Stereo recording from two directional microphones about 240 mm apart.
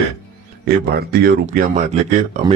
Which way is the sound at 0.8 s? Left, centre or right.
Right.